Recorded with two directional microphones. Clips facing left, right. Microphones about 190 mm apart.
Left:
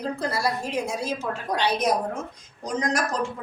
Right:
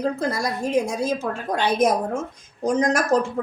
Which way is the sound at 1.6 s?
50° right (ahead or behind).